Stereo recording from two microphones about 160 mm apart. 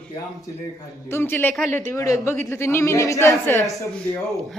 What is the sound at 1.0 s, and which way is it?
A man's voice, 15° left (ahead or behind).